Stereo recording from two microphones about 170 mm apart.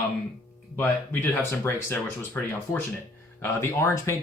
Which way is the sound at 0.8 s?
10° left (ahead or behind).